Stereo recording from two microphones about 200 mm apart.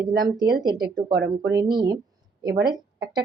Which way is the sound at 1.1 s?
60° right (ahead or behind).